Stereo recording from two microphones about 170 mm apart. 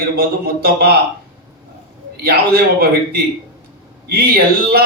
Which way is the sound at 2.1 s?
65° right (ahead or behind).